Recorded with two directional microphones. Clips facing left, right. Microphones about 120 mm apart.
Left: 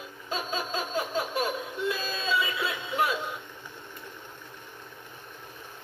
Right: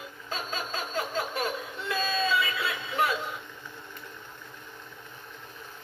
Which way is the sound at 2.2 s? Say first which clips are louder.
Right 1 dB; 15° left (ahead or behind).